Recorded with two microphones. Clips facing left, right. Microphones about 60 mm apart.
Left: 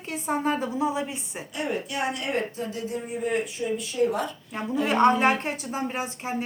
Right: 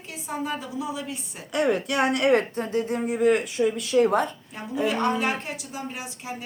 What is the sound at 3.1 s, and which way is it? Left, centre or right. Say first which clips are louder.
Speech: right 6 dB; right.